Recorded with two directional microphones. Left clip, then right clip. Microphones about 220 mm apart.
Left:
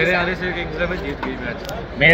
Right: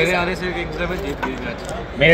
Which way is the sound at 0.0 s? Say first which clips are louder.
Even; 10° right (ahead or behind).